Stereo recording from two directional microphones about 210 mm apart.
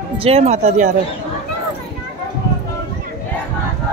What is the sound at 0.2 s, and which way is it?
Speech, 30° right (ahead or behind).